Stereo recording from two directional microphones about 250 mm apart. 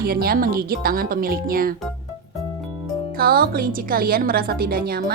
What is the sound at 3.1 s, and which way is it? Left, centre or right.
A woman's voice, right.